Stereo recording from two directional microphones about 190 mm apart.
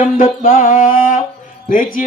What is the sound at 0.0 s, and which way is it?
A man's voice, 45° left (ahead or behind).